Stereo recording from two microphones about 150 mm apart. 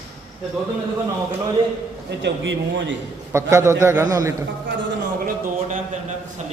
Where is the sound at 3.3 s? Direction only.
20° right (ahead or behind).